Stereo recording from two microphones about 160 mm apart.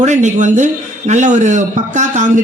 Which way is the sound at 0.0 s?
50° right (ahead or behind).